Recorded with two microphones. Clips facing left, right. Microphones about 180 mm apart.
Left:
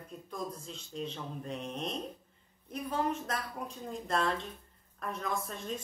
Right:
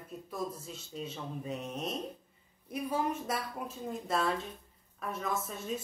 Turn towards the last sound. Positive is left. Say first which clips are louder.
# right 1 dB
turn(degrees=-5)  # may be behind; listen again after turning